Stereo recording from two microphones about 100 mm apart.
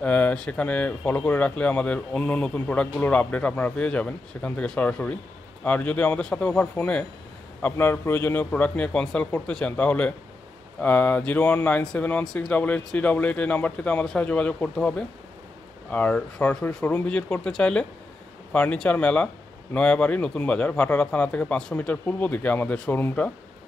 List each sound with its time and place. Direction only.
0.0 s speech: 15° left (ahead or behind)